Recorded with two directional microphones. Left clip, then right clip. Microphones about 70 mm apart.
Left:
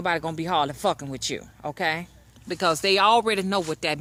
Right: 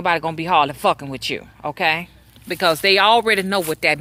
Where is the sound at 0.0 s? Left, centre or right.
Left.